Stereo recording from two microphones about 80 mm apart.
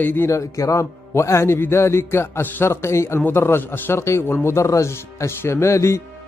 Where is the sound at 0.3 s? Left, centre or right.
Left.